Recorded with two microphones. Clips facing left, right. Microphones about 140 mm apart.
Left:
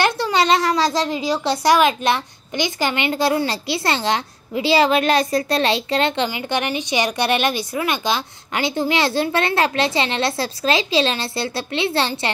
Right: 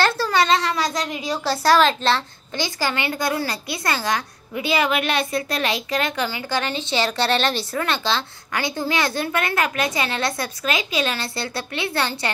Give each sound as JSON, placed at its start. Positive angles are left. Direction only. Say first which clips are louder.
{"t": 0.0, "sound": "a child's voice", "louder": "left 1 dB", "side_deg": 20}